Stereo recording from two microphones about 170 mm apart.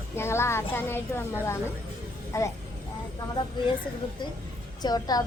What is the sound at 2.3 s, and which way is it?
Speech, 20° left (ahead or behind).